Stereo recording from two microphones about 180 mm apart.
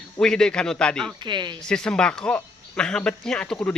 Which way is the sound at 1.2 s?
25° right (ahead or behind).